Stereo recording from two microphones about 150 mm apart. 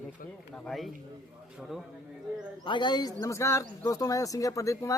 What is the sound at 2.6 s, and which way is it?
Speech, 30° left (ahead or behind).